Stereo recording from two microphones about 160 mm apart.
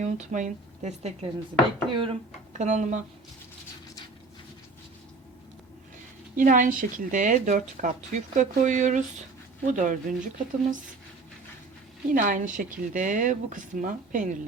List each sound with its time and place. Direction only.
0.0 s speech: 50° right (ahead or behind)
1.9 s speech: 35° right (ahead or behind)
2.5 s speech: 50° right (ahead or behind)
6.3 s speech: 55° right (ahead or behind)
12.1 s speech: 55° right (ahead or behind)